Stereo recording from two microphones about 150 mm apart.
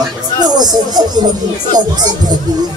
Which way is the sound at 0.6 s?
25° right (ahead or behind).